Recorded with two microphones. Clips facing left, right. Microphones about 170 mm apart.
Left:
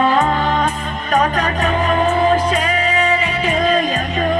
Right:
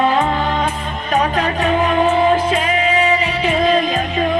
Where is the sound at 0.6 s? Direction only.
45° left (ahead or behind).